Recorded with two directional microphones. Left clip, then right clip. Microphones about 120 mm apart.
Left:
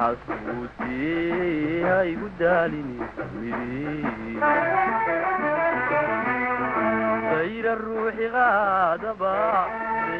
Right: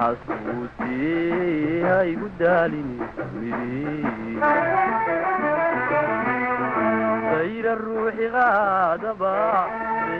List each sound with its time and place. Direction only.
1.0 s music: 35° right (ahead or behind)
4.0 s music: 30° right (ahead or behind)
5.4 s music: 40° right (ahead or behind)